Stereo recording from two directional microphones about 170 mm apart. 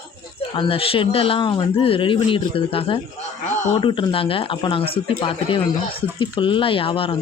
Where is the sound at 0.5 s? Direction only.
30° left (ahead or behind).